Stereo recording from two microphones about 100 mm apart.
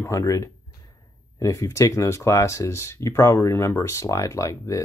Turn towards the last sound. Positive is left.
turn(degrees=30)  # may be behind; listen again after turning